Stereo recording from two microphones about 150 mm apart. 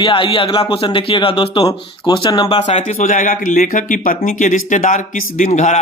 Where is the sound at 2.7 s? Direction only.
50° left (ahead or behind).